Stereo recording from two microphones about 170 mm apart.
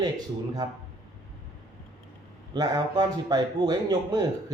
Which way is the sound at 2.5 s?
25° right (ahead or behind).